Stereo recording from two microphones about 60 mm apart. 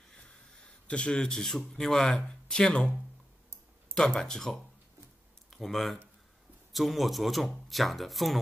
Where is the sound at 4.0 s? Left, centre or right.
Centre.